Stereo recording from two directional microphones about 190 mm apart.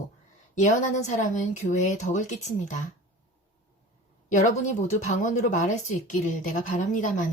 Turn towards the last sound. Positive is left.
turn(degrees=40)  # may be behind; listen again after turning